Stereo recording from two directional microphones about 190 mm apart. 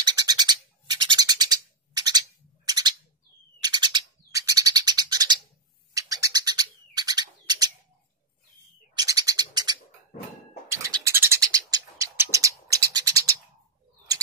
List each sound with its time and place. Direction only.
0.0 s a sound: 20° right (ahead or behind)
3.6 s bird: 20° right (ahead or behind)
8.9 s bird: 20° right (ahead or behind)